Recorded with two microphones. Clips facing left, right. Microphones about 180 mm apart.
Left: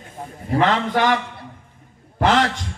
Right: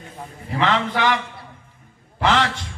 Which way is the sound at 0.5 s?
45° left (ahead or behind).